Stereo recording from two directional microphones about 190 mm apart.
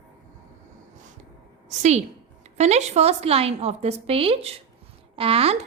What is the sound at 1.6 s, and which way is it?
A woman's voice, 40° right (ahead or behind).